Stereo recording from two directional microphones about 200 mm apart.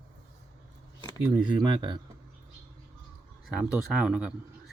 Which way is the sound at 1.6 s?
25° right (ahead or behind).